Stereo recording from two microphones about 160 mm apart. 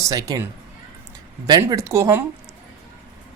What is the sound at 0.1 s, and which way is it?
Speech, 25° right (ahead or behind).